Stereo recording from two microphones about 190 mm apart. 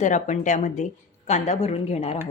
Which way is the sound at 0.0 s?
40° left (ahead or behind).